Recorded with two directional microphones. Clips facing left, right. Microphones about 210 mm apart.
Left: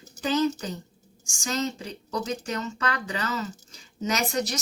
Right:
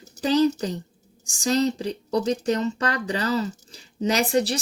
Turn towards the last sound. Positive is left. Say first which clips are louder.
# right 6 dB
turn(degrees=-30)  # may be behind; listen again after turning